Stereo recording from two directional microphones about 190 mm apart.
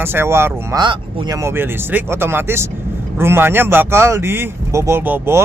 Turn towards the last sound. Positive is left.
turn(degrees=-10)  # may be behind; listen again after turning